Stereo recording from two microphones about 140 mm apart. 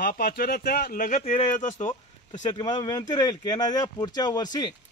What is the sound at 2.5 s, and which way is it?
Speech, 30° left (ahead or behind).